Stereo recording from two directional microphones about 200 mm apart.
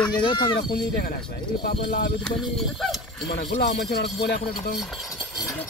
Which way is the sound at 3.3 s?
60° left (ahead or behind).